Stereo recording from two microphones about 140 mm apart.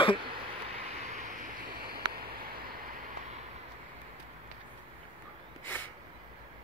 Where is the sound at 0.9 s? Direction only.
60° right (ahead or behind); by 2.4 s 90° right.